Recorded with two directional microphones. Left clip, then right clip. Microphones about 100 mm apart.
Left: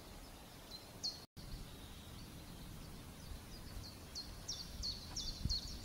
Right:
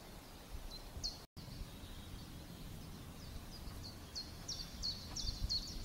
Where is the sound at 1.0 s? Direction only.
15° left (ahead or behind).